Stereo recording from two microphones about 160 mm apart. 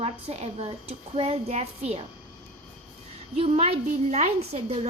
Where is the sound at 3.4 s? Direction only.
40° right (ahead or behind).